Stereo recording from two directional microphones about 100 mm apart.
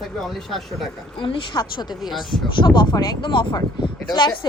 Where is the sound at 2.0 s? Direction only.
Centre (ahead or behind).